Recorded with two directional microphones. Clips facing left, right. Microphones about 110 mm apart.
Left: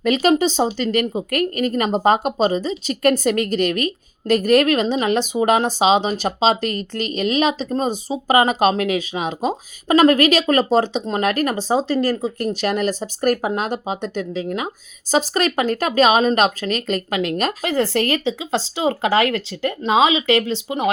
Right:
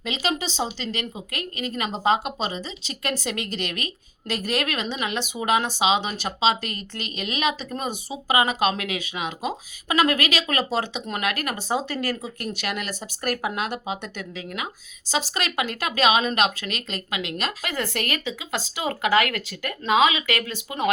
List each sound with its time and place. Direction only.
0.0 s speech: 50° left (ahead or behind)
17.7 s speech: 30° left (ahead or behind)